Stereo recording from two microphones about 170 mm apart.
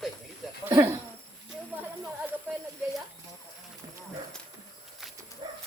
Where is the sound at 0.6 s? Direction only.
15° right (ahead or behind).